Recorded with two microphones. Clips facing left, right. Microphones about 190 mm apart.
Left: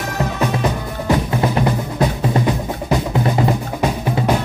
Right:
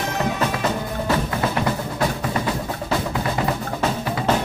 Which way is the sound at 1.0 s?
20° left (ahead or behind).